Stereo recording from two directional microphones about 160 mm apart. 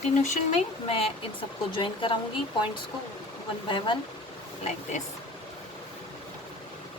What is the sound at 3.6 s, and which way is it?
Speech, 30° left (ahead or behind).